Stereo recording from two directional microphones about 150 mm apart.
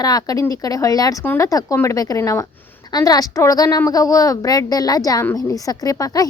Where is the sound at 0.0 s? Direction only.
25° left (ahead or behind).